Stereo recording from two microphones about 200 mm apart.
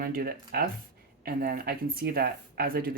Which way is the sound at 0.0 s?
45° right (ahead or behind).